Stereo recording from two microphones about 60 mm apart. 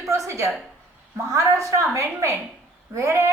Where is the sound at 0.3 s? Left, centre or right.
Right.